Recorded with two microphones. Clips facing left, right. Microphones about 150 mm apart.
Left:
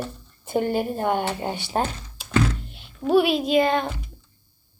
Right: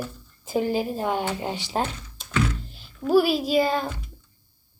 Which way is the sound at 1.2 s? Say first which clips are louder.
Left 1 dB; 25° left (ahead or behind).